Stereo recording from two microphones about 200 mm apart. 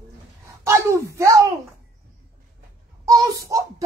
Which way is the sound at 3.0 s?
15° right (ahead or behind).